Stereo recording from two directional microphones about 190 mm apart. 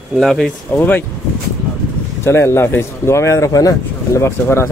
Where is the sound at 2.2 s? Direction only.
15° left (ahead or behind).